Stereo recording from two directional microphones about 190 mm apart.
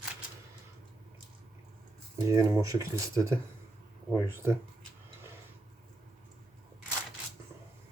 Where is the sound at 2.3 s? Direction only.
15° right (ahead or behind).